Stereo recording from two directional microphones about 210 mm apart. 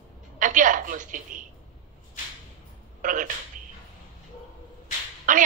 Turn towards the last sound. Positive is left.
turn(degrees=-40)  # may be behind; listen again after turning